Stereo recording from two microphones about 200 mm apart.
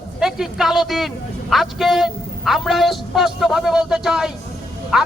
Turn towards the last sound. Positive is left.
turn(degrees=-5)  # may be behind; listen again after turning